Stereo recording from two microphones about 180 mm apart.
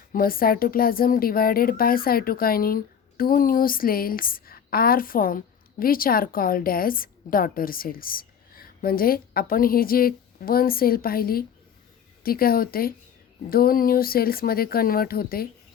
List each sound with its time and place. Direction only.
0.1 s a woman's voice: 55° left (ahead or behind)